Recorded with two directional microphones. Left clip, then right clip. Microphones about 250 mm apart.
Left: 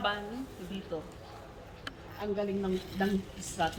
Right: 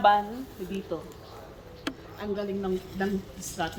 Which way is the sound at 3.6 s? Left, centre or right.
Right.